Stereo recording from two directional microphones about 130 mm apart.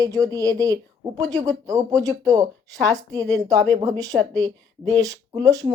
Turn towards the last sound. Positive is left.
turn(degrees=-30)  # may be behind; listen again after turning